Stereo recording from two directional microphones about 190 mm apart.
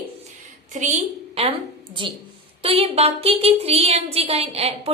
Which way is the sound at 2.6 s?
30° right (ahead or behind).